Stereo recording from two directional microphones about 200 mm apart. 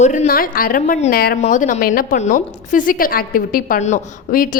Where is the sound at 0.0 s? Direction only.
35° left (ahead or behind).